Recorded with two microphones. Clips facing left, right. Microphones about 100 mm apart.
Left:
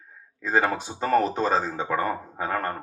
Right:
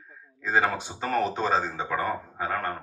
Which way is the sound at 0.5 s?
45° left (ahead or behind).